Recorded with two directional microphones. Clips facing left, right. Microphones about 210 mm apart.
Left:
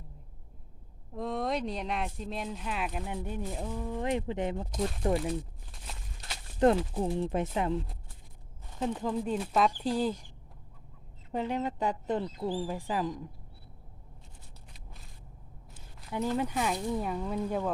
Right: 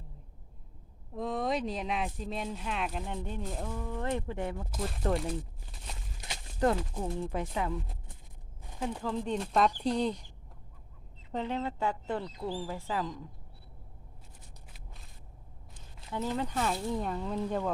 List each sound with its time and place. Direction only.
1.1 s speech: centre (ahead or behind); by 4.7 s 20° left (ahead or behind)
4.7 s speech: centre (ahead or behind)
5.1 s crumpling: centre (ahead or behind)
6.6 s speech: 20° left (ahead or behind)
9.0 s speech: 10° left (ahead or behind)
11.3 s speech: 10° left (ahead or behind)
16.4 s speech: 10° left (ahead or behind)